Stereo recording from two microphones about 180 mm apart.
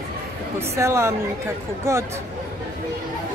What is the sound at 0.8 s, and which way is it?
A woman's voice, 15° right (ahead or behind).